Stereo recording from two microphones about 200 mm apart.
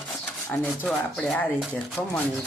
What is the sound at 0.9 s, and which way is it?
Speech, 5° left (ahead or behind).